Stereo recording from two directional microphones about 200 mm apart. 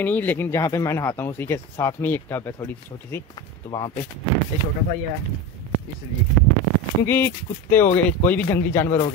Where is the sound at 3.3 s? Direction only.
20° left (ahead or behind).